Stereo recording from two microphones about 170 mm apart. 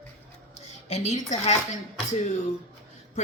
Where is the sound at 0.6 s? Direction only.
40° left (ahead or behind).